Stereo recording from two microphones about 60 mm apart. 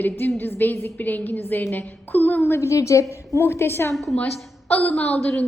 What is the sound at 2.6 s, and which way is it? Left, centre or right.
Speech, left.